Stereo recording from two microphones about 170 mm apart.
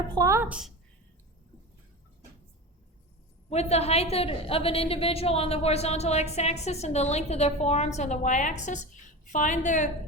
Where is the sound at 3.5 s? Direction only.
40° left (ahead or behind).